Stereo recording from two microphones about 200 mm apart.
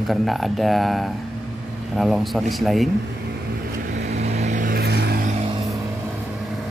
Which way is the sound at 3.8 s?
35° right (ahead or behind).